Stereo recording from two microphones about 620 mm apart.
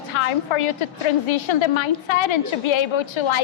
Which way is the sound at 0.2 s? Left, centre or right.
Left.